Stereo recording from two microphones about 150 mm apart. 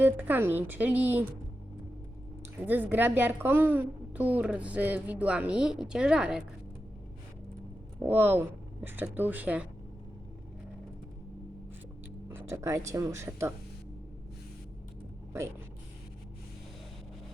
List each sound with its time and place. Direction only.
0.0 s a woman's voice: 15° right (ahead or behind)
2.6 s a woman's voice: 10° right (ahead or behind)
7.9 s a woman's voice: 15° right (ahead or behind)
12.3 s speech: 20° right (ahead or behind)